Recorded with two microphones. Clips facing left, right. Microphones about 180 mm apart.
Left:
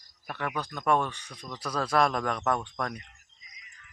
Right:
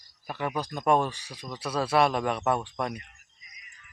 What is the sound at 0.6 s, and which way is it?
Speech, 15° right (ahead or behind).